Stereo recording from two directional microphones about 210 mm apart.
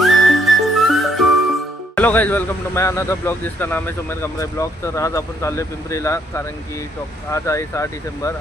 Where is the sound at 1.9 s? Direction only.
10° left (ahead or behind).